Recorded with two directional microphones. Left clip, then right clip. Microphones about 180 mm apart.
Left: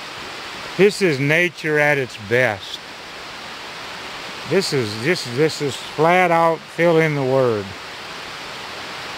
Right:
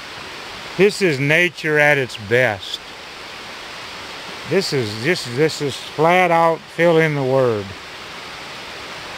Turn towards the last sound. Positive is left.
turn(degrees=0)  # may be behind; listen again after turning